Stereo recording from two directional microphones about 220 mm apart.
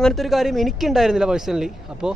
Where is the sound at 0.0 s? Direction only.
Centre (ahead or behind).